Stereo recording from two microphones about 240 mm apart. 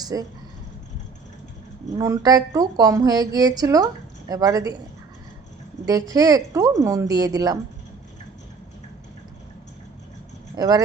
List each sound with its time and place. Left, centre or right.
0.0 s speech: centre
2.0 s speech: centre
5.8 s speech: centre
10.5 s speech: centre